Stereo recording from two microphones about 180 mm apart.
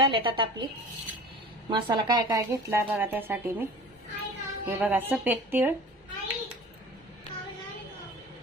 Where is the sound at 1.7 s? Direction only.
25° right (ahead or behind); by 5.7 s 10° right (ahead or behind).